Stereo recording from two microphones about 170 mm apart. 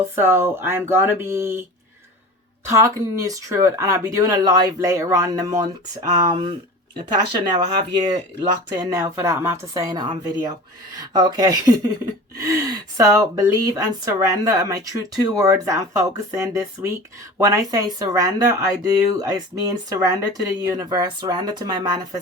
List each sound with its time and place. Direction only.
0.2 s speech: 15° right (ahead or behind)
2.6 s speech: 20° right (ahead or behind)